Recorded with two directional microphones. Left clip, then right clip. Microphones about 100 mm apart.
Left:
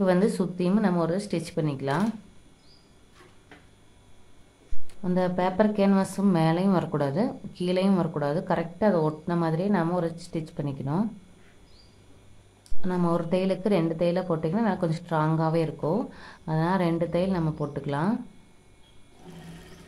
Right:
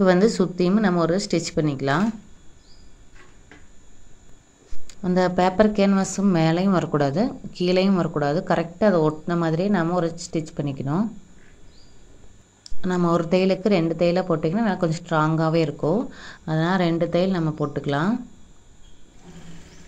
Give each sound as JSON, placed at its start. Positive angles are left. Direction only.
{"t": 0.0, "sound": "a woman's voice", "side_deg": -35}
{"t": 5.1, "sound": "a woman's voice", "side_deg": -35}
{"t": 12.8, "sound": "a woman's voice", "side_deg": -35}